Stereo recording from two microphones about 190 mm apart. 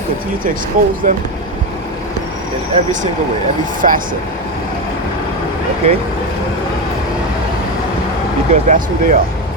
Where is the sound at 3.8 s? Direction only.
45° right (ahead or behind).